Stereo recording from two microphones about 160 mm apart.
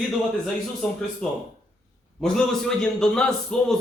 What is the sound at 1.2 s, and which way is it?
A man's voice, 5° left (ahead or behind).